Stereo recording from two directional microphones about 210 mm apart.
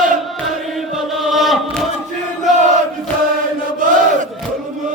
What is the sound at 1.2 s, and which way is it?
Chant, centre (ahead or behind).